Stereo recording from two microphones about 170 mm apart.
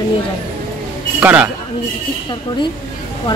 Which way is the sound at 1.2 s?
10° right (ahead or behind).